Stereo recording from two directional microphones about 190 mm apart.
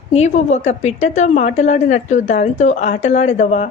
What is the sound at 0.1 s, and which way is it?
A woman's voice, 35° left (ahead or behind).